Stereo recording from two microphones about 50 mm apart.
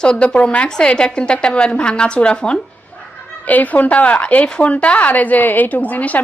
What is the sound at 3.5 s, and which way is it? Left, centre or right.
Speech, left.